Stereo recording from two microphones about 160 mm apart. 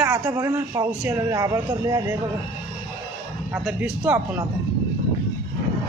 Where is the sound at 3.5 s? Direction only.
5° right (ahead or behind).